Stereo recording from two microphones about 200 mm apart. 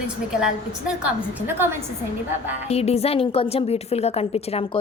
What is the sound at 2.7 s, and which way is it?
A woman's voice, 30° left (ahead or behind).